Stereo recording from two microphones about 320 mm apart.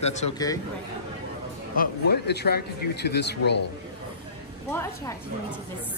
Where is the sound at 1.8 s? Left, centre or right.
Left.